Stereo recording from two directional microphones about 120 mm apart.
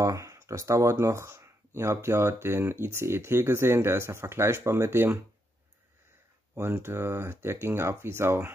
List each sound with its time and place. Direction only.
0.0 s speech: 25° right (ahead or behind)
6.5 s speech: 20° right (ahead or behind)